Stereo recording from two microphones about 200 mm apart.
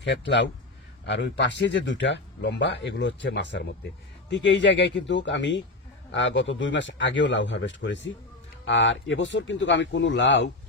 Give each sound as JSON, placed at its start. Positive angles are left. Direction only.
{"t": 0.0, "sound": "speech", "side_deg": 60}